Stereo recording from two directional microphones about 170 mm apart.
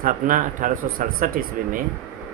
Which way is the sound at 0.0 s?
50° right (ahead or behind).